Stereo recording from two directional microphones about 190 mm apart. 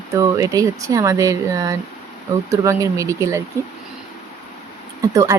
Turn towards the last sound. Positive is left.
turn(degrees=-20)  # may be behind; listen again after turning